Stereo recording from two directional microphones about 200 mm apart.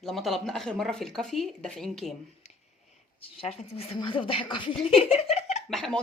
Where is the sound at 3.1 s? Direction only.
30° left (ahead or behind).